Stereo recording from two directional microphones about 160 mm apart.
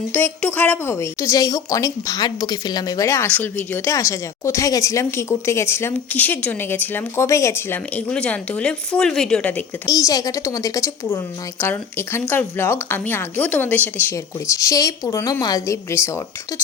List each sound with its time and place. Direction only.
0.1 s speech: 10° left (ahead or behind)
9.8 s a woman's voice: 25° left (ahead or behind)